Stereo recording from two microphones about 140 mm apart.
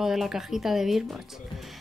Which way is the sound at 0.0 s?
5° right (ahead or behind).